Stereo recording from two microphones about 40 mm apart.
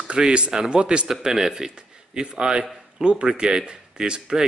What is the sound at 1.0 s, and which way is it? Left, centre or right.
Speech, centre.